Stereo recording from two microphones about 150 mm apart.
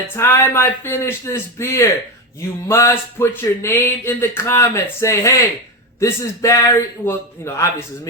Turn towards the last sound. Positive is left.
turn(degrees=20)  # may be behind; listen again after turning